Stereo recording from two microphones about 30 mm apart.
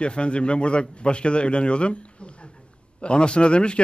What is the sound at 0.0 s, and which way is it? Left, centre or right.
A man's voice, left.